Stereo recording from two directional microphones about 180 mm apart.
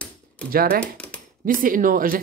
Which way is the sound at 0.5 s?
55° right (ahead or behind).